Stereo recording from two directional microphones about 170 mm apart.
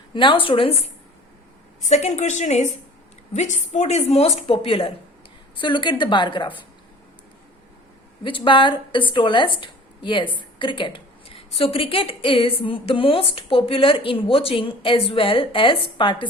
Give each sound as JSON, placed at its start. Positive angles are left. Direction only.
{"t": 0.1, "sound": "a woman's voice", "side_deg": 30}
{"t": 1.8, "sound": "a woman's voice", "side_deg": 40}
{"t": 8.2, "sound": "a woman's voice", "side_deg": 30}